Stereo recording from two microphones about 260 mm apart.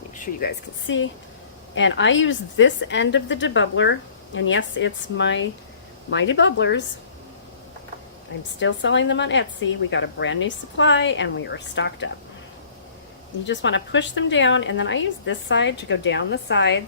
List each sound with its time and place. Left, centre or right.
0.4 s a woman's voice: left
8.5 s a woman's voice: left
13.5 s a woman's voice: left